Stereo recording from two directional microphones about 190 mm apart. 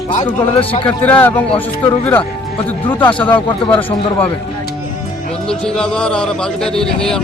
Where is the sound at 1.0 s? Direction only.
10° left (ahead or behind).